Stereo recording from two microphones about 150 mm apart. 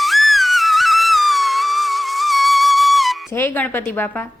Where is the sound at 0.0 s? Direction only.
Centre (ahead or behind).